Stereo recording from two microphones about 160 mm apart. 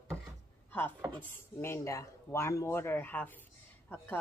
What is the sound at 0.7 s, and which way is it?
Chopping, 15° left (ahead or behind).